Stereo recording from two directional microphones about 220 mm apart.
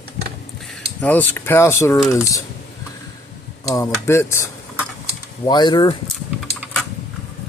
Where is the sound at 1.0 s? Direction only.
5° left (ahead or behind).